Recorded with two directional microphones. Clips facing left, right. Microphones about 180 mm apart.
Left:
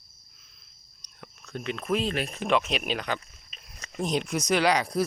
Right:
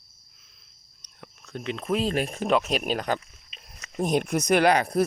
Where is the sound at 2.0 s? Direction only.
45° right (ahead or behind).